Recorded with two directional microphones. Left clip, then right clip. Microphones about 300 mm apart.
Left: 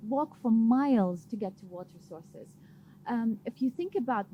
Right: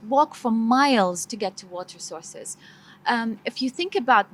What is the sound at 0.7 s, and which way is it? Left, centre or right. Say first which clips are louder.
A woman's voice: right 13 dB; centre.